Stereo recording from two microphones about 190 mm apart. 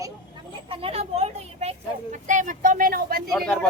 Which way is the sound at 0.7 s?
30° right (ahead or behind).